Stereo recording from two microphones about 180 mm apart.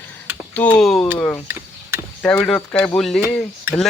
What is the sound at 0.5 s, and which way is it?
Speech, 5° left (ahead or behind).